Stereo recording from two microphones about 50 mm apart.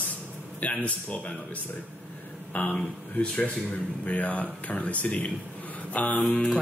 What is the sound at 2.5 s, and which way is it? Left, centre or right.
Speech, left.